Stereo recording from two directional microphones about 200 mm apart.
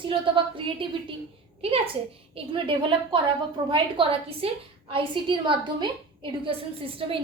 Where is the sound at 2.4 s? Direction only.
25° right (ahead or behind).